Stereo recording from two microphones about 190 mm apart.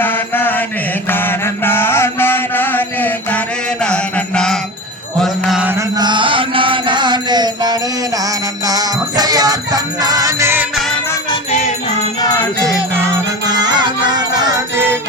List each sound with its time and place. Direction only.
0.0 s mantra: 10° left (ahead or behind)
5.2 s jingle bell: 5° right (ahead or behind)
6.0 s music: 25° right (ahead or behind)
13.5 s music: 20° right (ahead or behind)